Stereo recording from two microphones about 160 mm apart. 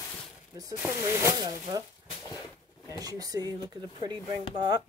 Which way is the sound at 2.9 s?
25° right (ahead or behind).